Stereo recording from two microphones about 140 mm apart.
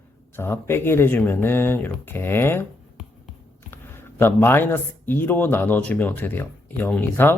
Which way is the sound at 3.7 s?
15° left (ahead or behind).